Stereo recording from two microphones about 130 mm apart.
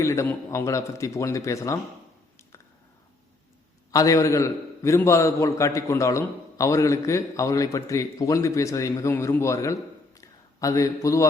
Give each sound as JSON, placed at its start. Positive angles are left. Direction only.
{"t": 0.0, "sound": "a man's voice", "side_deg": 20}
{"t": 3.9, "sound": "a man's voice", "side_deg": 25}
{"t": 10.2, "sound": "a sound", "side_deg": 25}